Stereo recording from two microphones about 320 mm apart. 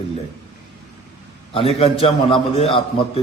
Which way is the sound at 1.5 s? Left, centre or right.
Centre.